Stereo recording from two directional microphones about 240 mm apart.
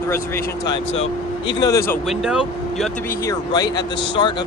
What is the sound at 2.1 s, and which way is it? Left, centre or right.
Speech, centre.